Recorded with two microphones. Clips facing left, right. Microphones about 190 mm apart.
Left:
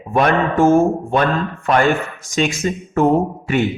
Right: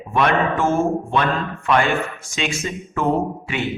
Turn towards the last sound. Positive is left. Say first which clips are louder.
# left 5 dB
turn(degrees=45)  # may be behind; listen again after turning